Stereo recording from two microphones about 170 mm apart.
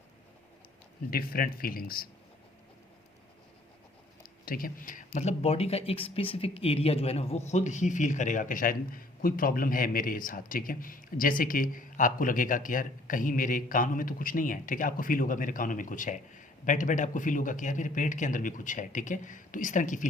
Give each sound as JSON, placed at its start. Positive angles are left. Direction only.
{"t": 1.1, "sound": "speech", "side_deg": 60}
{"t": 4.2, "sound": "speech", "side_deg": 60}